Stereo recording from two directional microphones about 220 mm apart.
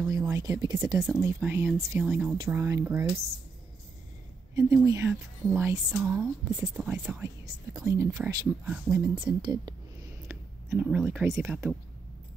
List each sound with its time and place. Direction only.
0.0 s a woman's voice: 15° right (ahead or behind)
2.3 s speech: 20° right (ahead or behind)
2.6 s a woman's voice: 10° right (ahead or behind)
4.6 s a woman's voice: 15° right (ahead or behind)
10.3 s a sound: 15° right (ahead or behind)
10.7 s a woman's voice: 5° right (ahead or behind)